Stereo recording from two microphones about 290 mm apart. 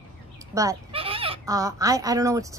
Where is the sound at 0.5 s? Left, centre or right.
Centre.